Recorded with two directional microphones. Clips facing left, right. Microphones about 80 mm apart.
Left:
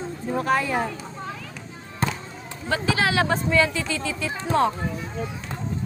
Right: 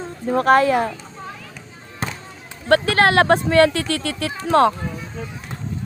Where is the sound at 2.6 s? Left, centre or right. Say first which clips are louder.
Right 8 dB; right.